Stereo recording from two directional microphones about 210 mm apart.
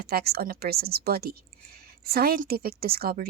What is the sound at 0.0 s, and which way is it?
Speech, 50° right (ahead or behind).